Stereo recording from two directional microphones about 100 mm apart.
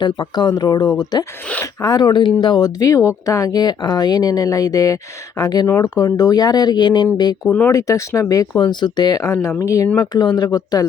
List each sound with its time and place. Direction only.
0.0 s speech: 50° left (ahead or behind)
5.6 s speech: 30° left (ahead or behind)
6.1 s speech: 40° left (ahead or behind)
7.4 s speech: 15° left (ahead or behind)
7.7 s speech: 35° left (ahead or behind)
10.0 s speech: 40° left (ahead or behind)